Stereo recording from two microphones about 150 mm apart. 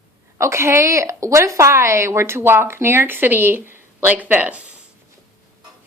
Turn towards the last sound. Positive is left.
turn(degrees=-10)  # may be behind; listen again after turning